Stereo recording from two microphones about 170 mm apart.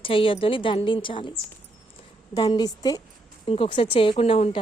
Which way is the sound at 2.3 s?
25° left (ahead or behind).